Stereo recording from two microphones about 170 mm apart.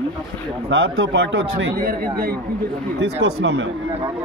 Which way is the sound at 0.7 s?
90° right.